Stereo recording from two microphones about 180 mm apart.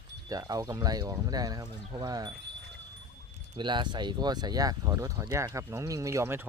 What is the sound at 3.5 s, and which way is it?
Speech, 25° right (ahead or behind).